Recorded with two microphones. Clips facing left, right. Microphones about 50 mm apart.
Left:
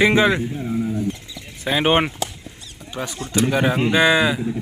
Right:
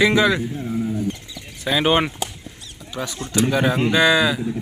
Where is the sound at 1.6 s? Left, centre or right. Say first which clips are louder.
Even; left.